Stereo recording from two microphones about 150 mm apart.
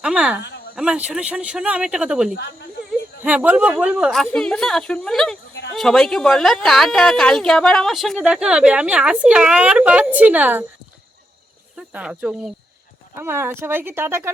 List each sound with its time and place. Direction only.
0.0 s speech: 5° right (ahead or behind)
11.8 s speech: 5° right (ahead or behind)